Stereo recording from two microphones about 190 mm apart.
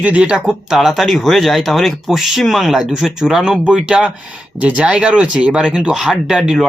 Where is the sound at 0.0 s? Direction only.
5° right (ahead or behind).